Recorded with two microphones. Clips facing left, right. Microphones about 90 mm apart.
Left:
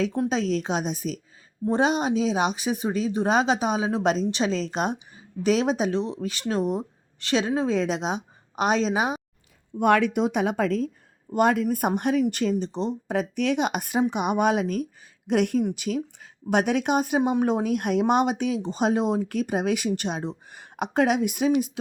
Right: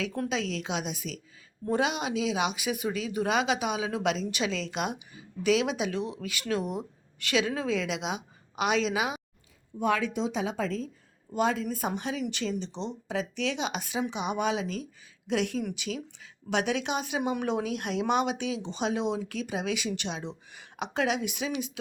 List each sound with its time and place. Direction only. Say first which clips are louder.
0.3 s speech: left 6 dB; 40° left (ahead or behind)
9.7 s speech: left 7 dB; 65° left (ahead or behind); by 21.7 s 45° left (ahead or behind)